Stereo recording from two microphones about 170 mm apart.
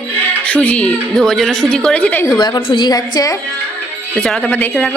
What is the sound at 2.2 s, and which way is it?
A woman's voice, 20° left (ahead or behind).